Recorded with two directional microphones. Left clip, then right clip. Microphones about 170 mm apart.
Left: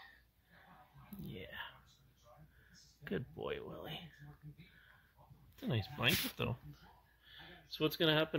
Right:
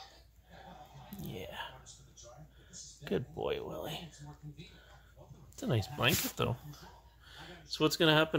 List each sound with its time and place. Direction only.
1.2 s whispering: centre (ahead or behind)
3.0 s speech: centre (ahead or behind)
5.6 s speech: 5° right (ahead or behind)
7.2 s a sound: 5° right (ahead or behind)